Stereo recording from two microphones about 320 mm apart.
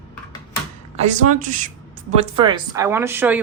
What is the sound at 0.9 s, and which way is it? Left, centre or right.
A woman's voice, right.